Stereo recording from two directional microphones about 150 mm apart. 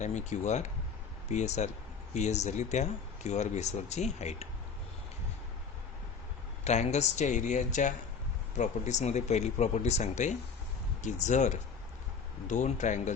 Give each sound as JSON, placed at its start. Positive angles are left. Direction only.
{"t": 0.0, "sound": "speech", "side_deg": 50}
{"t": 6.7, "sound": "speech", "side_deg": 50}